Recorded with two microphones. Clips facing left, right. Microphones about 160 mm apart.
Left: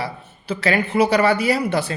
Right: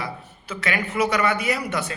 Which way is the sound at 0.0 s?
35° left (ahead or behind).